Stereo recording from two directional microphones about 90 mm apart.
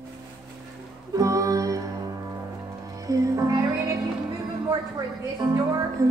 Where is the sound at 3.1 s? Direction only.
40° right (ahead or behind).